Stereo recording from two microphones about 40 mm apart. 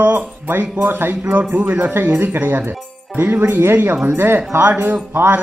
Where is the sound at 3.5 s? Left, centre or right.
Right.